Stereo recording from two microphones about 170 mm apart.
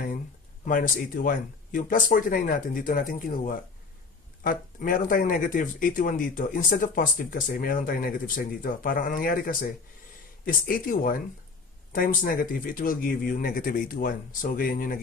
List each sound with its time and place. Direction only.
0.7 s speech: 55° left (ahead or behind)